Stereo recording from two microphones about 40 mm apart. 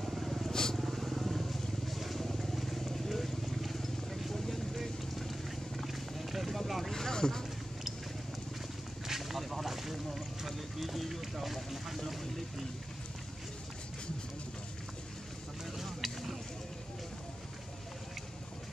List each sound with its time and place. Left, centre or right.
0.0 s vehicle: centre
0.5 s vehicle: centre
0.7 s vehicle: centre
5.8 s wild animals: centre
6.9 s vehicle: centre
9.0 s boat: centre
12.1 s vehicle: centre
15.8 s a sound: centre